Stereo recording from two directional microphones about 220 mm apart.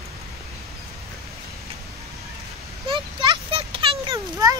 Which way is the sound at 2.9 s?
20° right (ahead or behind).